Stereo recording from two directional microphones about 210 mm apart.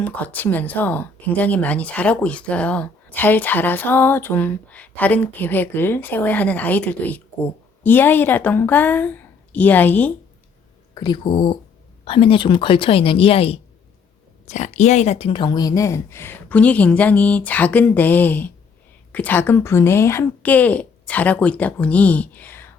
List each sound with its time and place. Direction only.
0.0 s speech: 5° left (ahead or behind)
10.9 s speech: 20° left (ahead or behind)